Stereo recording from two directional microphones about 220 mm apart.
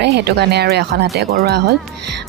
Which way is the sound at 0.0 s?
50° right (ahead or behind).